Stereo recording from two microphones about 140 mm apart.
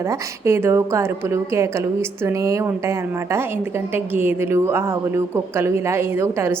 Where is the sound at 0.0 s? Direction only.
20° right (ahead or behind).